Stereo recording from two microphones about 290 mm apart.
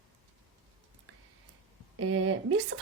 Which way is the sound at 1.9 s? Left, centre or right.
Right.